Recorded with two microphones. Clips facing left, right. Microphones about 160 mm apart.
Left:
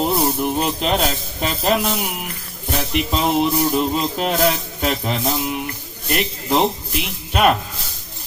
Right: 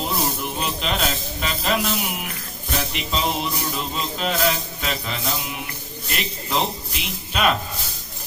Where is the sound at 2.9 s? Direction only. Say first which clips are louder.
Left 8 dB; 55° left (ahead or behind).